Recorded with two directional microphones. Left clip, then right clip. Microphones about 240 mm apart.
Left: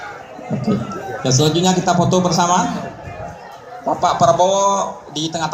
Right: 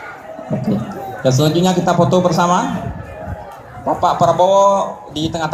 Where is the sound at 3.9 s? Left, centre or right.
Centre.